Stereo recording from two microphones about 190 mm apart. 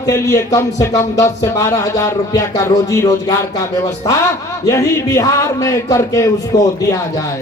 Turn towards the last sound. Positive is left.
turn(degrees=15)  # may be behind; listen again after turning